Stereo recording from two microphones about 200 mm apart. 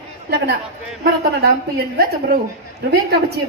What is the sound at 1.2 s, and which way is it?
A woman's voice, 50° right (ahead or behind).